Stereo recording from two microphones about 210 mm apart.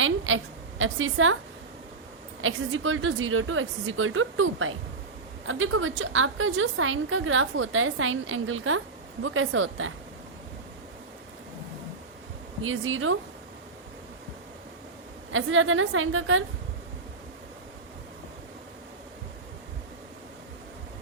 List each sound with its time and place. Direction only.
0.0 s a sound: 70° right (ahead or behind)
2.4 s a woman's voice: 70° right (ahead or behind)
12.6 s a woman's voice: 70° right (ahead or behind)
15.3 s a woman's voice: 70° right (ahead or behind)